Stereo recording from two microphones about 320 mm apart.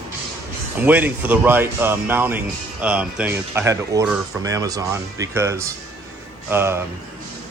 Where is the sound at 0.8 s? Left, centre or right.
Centre.